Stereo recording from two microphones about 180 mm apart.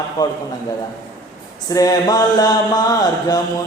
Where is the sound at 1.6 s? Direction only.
20° left (ahead or behind).